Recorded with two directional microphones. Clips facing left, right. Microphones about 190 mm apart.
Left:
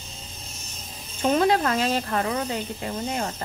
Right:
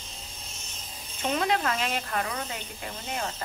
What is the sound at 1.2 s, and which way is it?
Speech, 35° left (ahead or behind).